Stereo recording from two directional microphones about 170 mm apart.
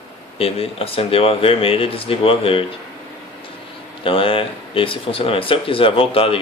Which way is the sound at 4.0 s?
30° left (ahead or behind).